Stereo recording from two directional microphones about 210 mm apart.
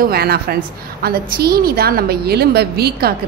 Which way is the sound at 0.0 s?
45° right (ahead or behind).